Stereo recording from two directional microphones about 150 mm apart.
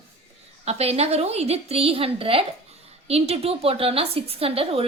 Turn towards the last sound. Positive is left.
turn(degrees=-40)  # may be behind; listen again after turning